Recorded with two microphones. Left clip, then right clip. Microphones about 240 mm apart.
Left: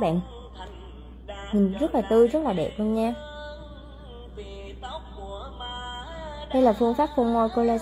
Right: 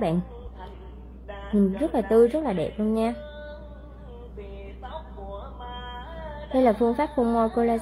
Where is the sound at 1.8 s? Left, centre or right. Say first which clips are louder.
Even; centre.